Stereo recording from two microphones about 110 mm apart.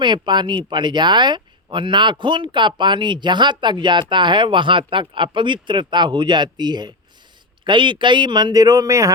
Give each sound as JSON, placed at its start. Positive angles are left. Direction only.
{"t": 0.0, "sound": "speech", "side_deg": -45}